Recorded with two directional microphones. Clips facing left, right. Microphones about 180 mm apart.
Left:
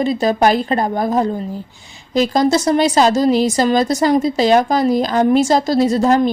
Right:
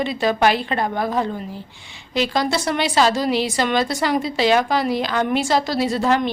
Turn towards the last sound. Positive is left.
turn(degrees=40)  # may be behind; listen again after turning